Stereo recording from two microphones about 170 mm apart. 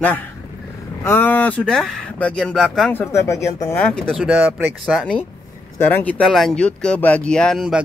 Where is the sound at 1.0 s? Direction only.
10° left (ahead or behind).